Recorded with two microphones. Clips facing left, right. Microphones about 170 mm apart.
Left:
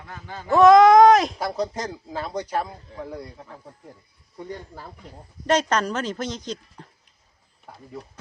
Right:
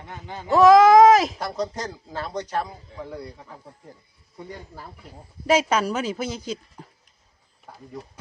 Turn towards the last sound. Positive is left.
turn(degrees=-5)  # may be behind; listen again after turning